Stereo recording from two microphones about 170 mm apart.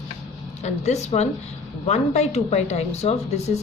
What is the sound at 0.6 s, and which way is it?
A woman's voice, 40° left (ahead or behind).